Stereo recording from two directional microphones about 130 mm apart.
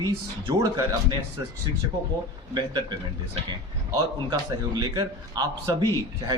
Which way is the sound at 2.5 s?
35° right (ahead or behind).